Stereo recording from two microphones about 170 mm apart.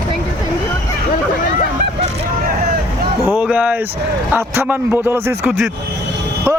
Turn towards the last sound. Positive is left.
turn(degrees=-15)  # may be behind; listen again after turning